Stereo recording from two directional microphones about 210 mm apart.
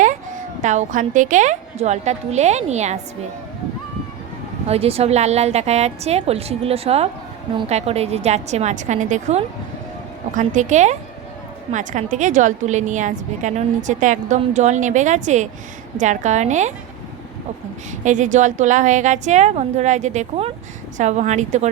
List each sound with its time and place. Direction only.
0.6 s a woman's voice: 35° right (ahead or behind)
4.7 s a woman's voice: 30° right (ahead or behind)
18.0 s a woman's voice: 35° right (ahead or behind)